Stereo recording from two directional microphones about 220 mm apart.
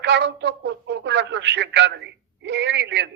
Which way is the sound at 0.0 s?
50° right (ahead or behind).